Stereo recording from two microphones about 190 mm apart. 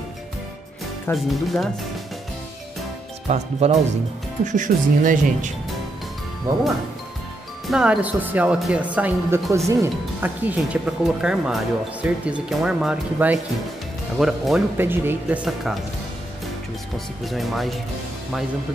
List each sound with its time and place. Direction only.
1.1 s speech: centre (ahead or behind)
3.3 s speech: 35° right (ahead or behind)
6.5 s speech: 15° right (ahead or behind)
7.7 s speech: 5° right (ahead or behind)
17.2 s speech: centre (ahead or behind)